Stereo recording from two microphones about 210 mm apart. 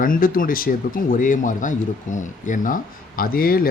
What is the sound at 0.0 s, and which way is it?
Speech, 40° left (ahead or behind).